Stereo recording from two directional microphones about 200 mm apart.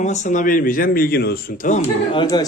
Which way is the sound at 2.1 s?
20° left (ahead or behind).